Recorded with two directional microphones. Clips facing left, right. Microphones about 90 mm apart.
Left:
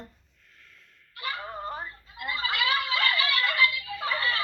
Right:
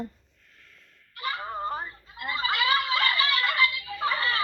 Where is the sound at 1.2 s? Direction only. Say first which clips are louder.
Right 3 dB; 10° right (ahead or behind).